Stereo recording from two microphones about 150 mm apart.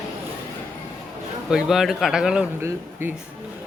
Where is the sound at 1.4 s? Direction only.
5° right (ahead or behind).